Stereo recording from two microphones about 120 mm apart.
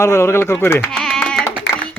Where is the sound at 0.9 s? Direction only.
5° left (ahead or behind).